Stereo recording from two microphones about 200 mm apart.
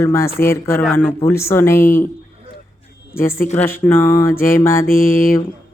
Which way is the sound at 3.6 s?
10° left (ahead or behind).